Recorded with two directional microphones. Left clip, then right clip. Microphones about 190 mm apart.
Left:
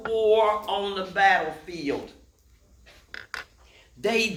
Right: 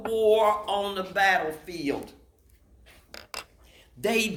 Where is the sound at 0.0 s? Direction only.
50° right (ahead or behind).